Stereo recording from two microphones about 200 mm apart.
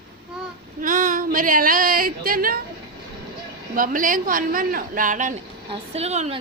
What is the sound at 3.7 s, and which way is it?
A woman's voice, 45° right (ahead or behind).